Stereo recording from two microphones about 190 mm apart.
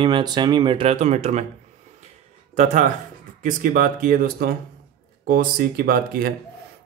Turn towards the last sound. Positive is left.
turn(degrees=-50)  # may be behind; listen again after turning